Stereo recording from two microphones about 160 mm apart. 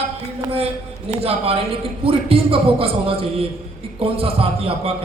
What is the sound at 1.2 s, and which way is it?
A man's voice, 35° right (ahead or behind).